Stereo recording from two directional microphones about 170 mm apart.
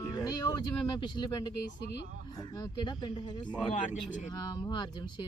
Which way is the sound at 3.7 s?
45° left (ahead or behind).